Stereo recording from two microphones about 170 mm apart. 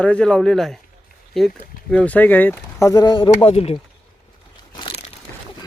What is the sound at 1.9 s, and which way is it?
Speech, 5° left (ahead or behind).